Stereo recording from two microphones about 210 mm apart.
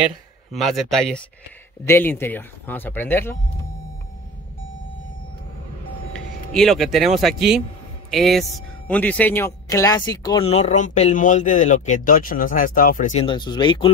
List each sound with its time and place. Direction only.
0.0 s speech: centre (ahead or behind)
6.1 s speech: centre (ahead or behind)
10.4 s speech: 30° left (ahead or behind)
13.2 s speech: 20° left (ahead or behind)